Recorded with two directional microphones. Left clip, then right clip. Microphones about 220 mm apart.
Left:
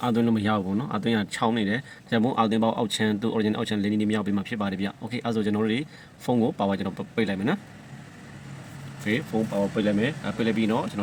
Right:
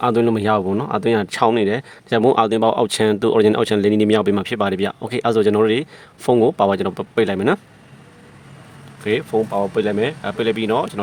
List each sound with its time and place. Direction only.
0.0 s speech: 45° right (ahead or behind)
9.1 s speech: 50° right (ahead or behind)